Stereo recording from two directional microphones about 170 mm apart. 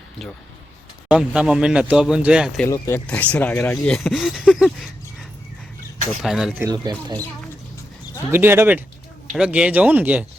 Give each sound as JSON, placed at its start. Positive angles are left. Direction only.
{"t": 1.0, "sound": "speech", "side_deg": -5}
{"t": 2.6, "sound": "speech", "side_deg": 15}
{"t": 6.2, "sound": "speech", "side_deg": 0}
{"t": 6.6, "sound": "speech", "side_deg": -25}
{"t": 8.3, "sound": "speech", "side_deg": -15}